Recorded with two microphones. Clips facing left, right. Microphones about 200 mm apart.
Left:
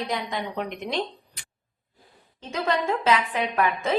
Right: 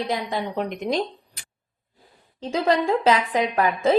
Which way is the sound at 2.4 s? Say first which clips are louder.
Right 5 dB; 30° right (ahead or behind).